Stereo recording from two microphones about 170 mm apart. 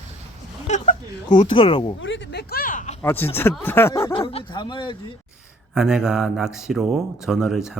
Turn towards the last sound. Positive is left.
turn(degrees=0)  # may be behind; listen again after turning